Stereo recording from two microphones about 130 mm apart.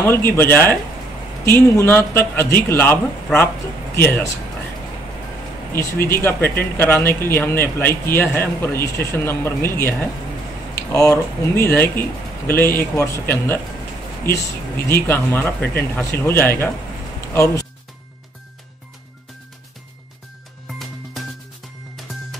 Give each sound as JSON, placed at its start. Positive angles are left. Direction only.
{"t": 0.0, "sound": "speech", "side_deg": 15}
{"t": 5.7, "sound": "speech", "side_deg": 15}
{"t": 14.9, "sound": "speech", "side_deg": 15}
{"t": 20.6, "sound": "music", "side_deg": 0}